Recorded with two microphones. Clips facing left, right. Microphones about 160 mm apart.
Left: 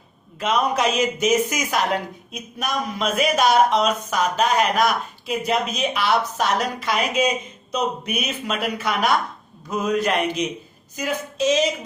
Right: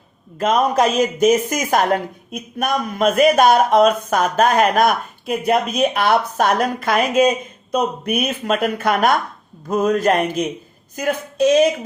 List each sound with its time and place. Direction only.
0.3 s speech: 45° right (ahead or behind)